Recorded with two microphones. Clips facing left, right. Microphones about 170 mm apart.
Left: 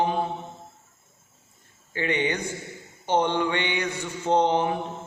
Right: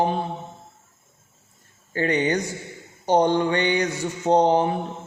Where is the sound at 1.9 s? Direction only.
40° right (ahead or behind).